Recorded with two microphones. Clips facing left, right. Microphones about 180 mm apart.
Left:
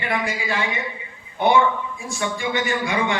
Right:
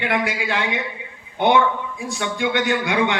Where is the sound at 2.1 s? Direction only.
65° right (ahead or behind).